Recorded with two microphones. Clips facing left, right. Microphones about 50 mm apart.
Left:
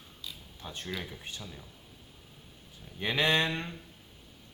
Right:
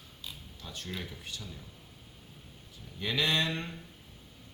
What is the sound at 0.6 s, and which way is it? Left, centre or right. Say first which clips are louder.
Speech: left 2 dB; left.